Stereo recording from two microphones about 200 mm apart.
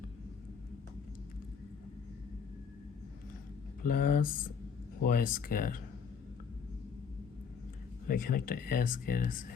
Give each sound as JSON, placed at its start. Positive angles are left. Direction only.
{"t": 3.8, "sound": "speech", "side_deg": 45}
{"t": 8.0, "sound": "speech", "side_deg": 45}